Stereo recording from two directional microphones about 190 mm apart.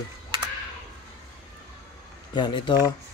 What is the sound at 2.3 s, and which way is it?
Speech, 25° left (ahead or behind).